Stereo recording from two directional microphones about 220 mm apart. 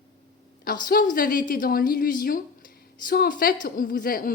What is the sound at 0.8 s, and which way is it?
A woman's voice, 40° left (ahead or behind).